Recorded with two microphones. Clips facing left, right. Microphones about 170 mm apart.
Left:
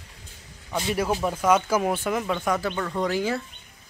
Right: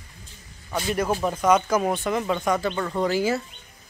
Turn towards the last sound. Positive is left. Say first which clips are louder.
# right 2 dB
turn(degrees=-5)  # may be behind; listen again after turning